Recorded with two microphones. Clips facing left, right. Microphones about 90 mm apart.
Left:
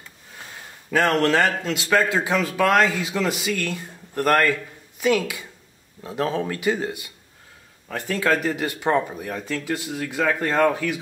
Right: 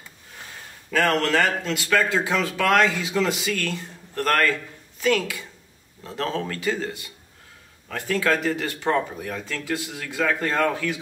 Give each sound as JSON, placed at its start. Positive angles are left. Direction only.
{"t": 0.9, "sound": "a man's voice", "side_deg": 20}